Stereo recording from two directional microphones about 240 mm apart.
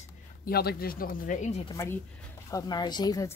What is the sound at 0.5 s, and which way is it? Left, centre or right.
Speech, left.